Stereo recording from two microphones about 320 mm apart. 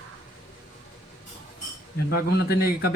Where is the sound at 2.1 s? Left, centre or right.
Left.